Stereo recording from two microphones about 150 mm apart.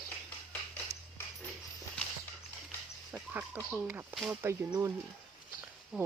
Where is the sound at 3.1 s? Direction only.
15° right (ahead or behind).